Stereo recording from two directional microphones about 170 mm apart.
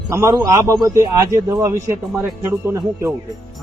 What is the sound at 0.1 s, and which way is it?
A man's voice, 20° right (ahead or behind).